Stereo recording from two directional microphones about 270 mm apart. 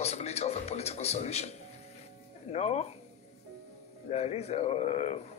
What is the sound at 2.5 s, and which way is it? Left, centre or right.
Speech, left.